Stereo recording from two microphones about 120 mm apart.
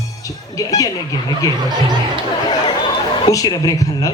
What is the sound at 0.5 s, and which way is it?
Speech, 30° left (ahead or behind).